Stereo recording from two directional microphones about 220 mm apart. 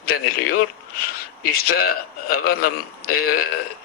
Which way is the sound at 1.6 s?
45° left (ahead or behind).